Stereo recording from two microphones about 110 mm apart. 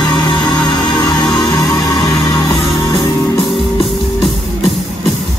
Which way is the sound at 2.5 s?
30° left (ahead or behind).